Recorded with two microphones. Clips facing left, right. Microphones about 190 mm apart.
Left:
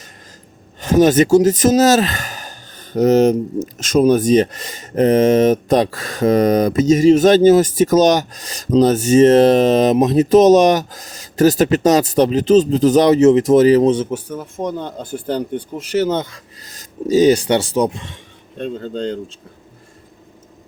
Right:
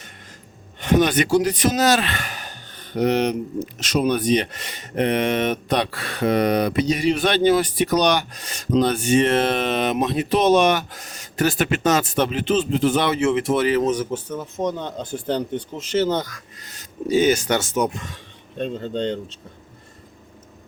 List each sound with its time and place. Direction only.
0.8 s speech: 40° left (ahead or behind); by 14.2 s 25° left (ahead or behind)
14.3 s speech: 5° left (ahead or behind)
16.6 s speech: 40° left (ahead or behind)
18.5 s speech: centre (ahead or behind)